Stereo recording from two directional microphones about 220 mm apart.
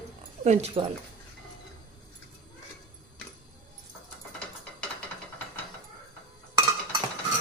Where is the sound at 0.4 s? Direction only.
30° right (ahead or behind).